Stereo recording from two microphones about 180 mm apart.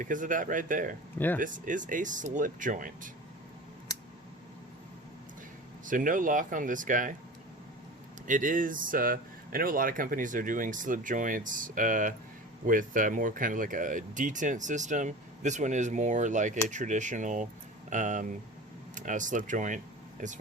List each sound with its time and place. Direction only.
0.0 s speech: 45° right (ahead or behind)
5.8 s speech: 50° right (ahead or behind)
8.3 s speech: 45° right (ahead or behind)